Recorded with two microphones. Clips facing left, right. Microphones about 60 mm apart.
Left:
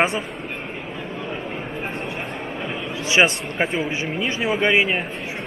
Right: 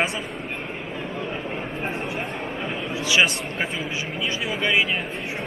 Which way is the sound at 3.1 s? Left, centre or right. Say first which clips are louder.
Left 3 dB; left.